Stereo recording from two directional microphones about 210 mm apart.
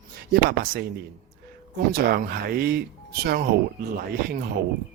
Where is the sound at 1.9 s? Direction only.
50° right (ahead or behind).